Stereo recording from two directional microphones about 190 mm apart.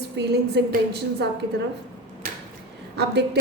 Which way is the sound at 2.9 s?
60° right (ahead or behind).